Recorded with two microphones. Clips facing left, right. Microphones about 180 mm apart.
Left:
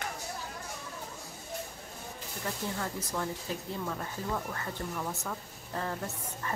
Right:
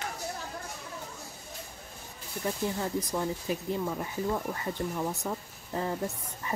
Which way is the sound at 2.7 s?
20° right (ahead or behind).